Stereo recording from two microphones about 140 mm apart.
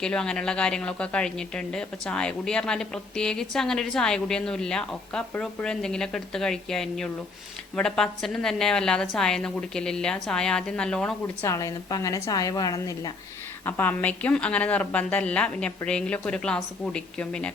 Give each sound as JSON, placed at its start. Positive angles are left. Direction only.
{"t": 0.0, "sound": "speech", "side_deg": 5}
{"t": 11.4, "sound": "a woman's voice", "side_deg": 25}
{"t": 13.7, "sound": "a woman's voice", "side_deg": 15}